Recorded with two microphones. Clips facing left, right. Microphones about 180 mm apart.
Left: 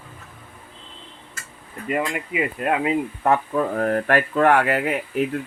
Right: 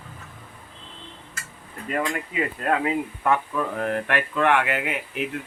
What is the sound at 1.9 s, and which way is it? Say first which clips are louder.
Speech: left 2 dB; 10° left (ahead or behind).